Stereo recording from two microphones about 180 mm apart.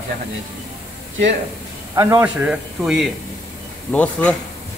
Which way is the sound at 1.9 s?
20° right (ahead or behind).